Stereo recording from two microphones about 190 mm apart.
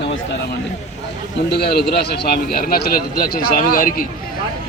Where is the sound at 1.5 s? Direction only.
60° left (ahead or behind).